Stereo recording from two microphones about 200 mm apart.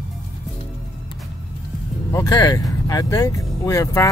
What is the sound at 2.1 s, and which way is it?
Speech, 15° left (ahead or behind).